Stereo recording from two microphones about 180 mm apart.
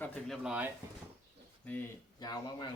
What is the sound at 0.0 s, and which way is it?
Speech, 5° left (ahead or behind).